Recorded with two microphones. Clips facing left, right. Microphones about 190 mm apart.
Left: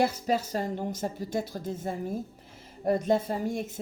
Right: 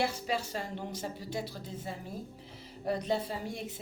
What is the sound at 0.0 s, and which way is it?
Speech, 40° left (ahead or behind).